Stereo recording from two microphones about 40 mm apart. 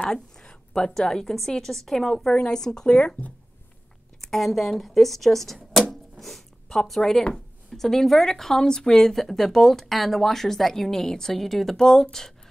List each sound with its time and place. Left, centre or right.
0.0 s speech: left
4.3 s a woman's voice: centre
5.9 s a sound: centre
7.0 s speech: centre